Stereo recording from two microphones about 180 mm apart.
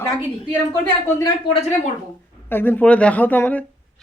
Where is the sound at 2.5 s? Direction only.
10° left (ahead or behind).